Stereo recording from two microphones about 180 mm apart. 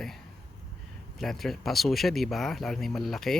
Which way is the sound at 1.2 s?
Centre (ahead or behind).